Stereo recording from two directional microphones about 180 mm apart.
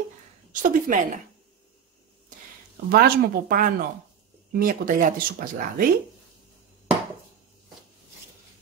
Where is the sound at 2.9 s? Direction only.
60° right (ahead or behind).